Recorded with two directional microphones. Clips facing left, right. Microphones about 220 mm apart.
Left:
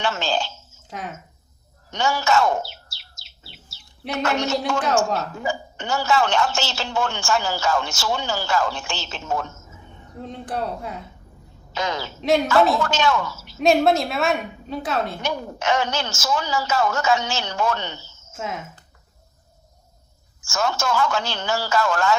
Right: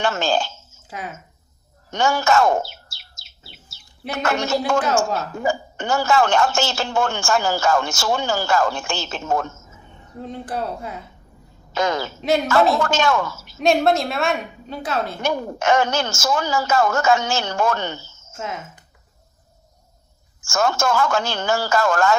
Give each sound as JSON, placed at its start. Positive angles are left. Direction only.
{"t": 0.0, "sound": "a woman's voice", "side_deg": -50}
{"t": 0.9, "sound": "speech", "side_deg": -5}
{"t": 1.9, "sound": "chirp", "side_deg": -50}
{"t": 4.2, "sound": "a woman's voice", "side_deg": -50}
{"t": 10.2, "sound": "a woman's voice", "side_deg": 0}
{"t": 11.7, "sound": "a woman's voice", "side_deg": -50}
{"t": 13.6, "sound": "a woman's voice", "side_deg": 0}
{"t": 15.2, "sound": "a woman's voice", "side_deg": -50}
{"t": 18.3, "sound": "a woman's voice", "side_deg": 0}
{"t": 20.4, "sound": "a woman's voice", "side_deg": -50}